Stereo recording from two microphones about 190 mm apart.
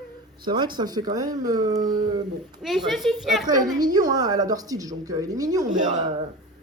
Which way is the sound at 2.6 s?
Centre (ahead or behind).